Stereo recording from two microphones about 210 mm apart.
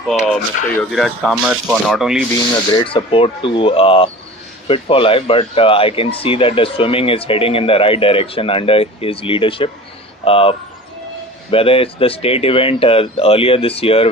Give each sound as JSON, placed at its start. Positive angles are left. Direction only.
{"t": 0.3, "sound": "speech", "side_deg": 5}
{"t": 2.7, "sound": "speech", "side_deg": 25}
{"t": 11.5, "sound": "speech", "side_deg": 25}